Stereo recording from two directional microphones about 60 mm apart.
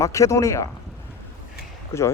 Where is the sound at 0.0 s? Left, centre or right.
Left.